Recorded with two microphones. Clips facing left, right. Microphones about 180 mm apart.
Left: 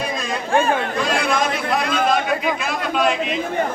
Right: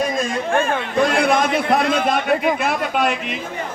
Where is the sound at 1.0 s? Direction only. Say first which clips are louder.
Right 5 dB; 55° right (ahead or behind).